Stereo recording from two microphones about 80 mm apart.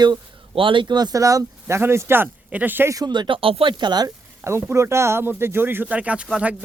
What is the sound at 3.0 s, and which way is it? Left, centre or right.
Speech, right.